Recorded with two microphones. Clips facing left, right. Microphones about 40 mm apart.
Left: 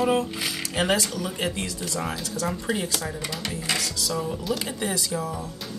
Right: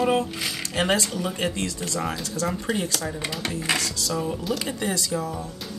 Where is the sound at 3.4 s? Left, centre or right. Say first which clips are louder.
Right 3 dB; right.